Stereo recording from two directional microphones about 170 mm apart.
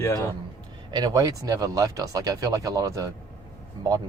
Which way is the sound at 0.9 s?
25° right (ahead or behind).